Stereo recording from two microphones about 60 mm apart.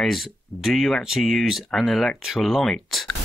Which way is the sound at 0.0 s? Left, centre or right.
Centre.